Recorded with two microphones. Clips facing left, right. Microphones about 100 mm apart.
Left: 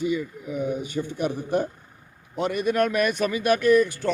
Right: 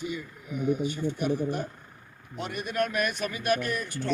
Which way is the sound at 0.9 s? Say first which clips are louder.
Left 1 dB; 90° left.